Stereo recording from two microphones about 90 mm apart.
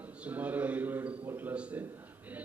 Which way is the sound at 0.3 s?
15° right (ahead or behind).